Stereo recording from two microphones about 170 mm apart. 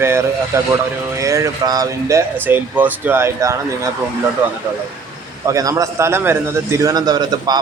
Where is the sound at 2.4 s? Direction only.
10° right (ahead or behind).